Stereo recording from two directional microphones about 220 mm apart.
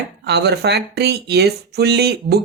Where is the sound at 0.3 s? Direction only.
50° right (ahead or behind).